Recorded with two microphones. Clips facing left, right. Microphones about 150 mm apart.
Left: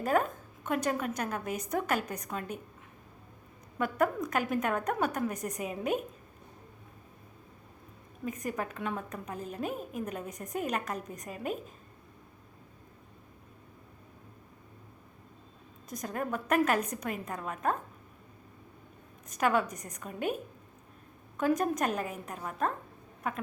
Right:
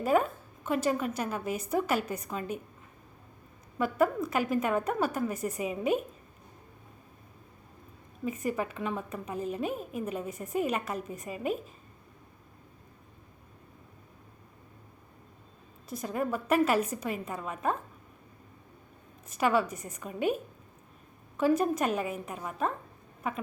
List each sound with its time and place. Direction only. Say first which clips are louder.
0.0 s a woman's voice: right 2 dB; 5° right (ahead or behind)
3.8 s a woman's voice: right 2 dB; 5° right (ahead or behind)
8.2 s a woman's voice: right 3 dB; 5° right (ahead or behind)
15.9 s a woman's voice: right 3 dB; 5° right (ahead or behind)
19.4 s a woman's voice: right 1 dB; 5° right (ahead or behind)
21.3 s a woman's voice: right 2 dB; 5° right (ahead or behind)